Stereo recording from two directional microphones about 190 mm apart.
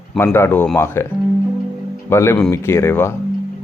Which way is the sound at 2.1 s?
15° left (ahead or behind).